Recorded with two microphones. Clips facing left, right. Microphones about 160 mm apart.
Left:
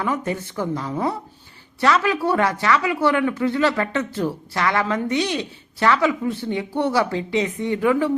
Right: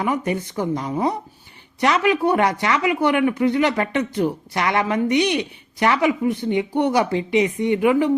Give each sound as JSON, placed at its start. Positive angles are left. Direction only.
{"t": 0.3, "sound": "speech", "side_deg": -15}